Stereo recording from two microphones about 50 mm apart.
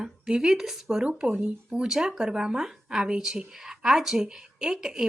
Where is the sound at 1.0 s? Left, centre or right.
Centre.